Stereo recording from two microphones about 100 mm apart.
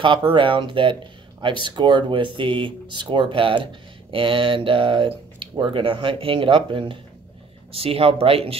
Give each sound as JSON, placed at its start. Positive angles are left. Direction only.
{"t": 0.3, "sound": "speech", "side_deg": -55}
{"t": 7.7, "sound": "speech", "side_deg": -75}